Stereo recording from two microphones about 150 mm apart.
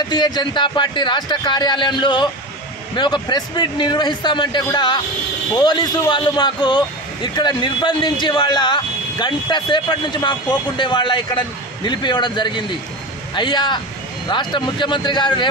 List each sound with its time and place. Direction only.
0.1 s speech: 30° left (ahead or behind)